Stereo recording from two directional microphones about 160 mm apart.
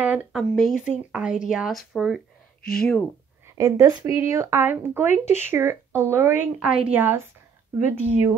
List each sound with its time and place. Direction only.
0.0 s speech: 10° right (ahead or behind)
3.5 s speech: 20° right (ahead or behind)